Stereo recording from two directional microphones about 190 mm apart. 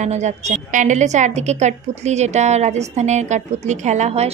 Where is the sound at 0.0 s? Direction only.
35° right (ahead or behind).